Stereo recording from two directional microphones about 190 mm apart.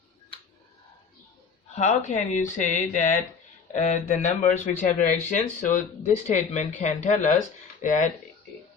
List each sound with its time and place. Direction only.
1.7 s speech: 35° left (ahead or behind)